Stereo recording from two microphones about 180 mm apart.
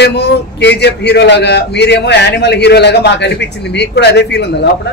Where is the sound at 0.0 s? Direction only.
70° left (ahead or behind).